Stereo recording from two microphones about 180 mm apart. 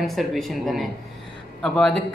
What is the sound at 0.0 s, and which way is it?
Speech, centre (ahead or behind).